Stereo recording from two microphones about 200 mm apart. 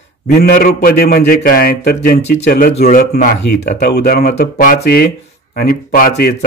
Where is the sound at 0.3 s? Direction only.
50° left (ahead or behind).